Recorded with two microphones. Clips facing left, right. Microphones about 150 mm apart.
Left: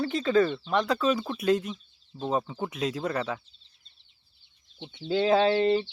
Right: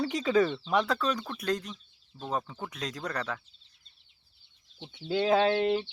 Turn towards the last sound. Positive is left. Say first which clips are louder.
# left 3 dB
turn(degrees=-5)  # may be behind; listen again after turning